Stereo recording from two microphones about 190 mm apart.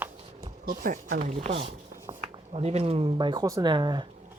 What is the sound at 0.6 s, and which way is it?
Speech, 50° right (ahead or behind).